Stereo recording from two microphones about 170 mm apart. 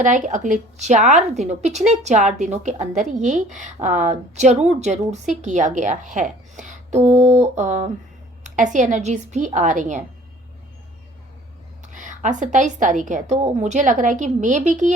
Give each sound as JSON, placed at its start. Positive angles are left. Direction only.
{"t": 0.0, "sound": "a woman's voice", "side_deg": -45}
{"t": 11.8, "sound": "a woman's voice", "side_deg": -45}